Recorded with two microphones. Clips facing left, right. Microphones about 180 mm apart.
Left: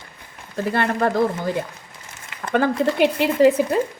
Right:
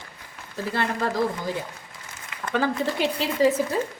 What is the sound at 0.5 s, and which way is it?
Speech, 55° left (ahead or behind).